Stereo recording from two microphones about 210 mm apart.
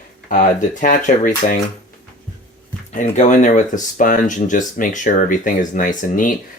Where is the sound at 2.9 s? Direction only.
35° left (ahead or behind).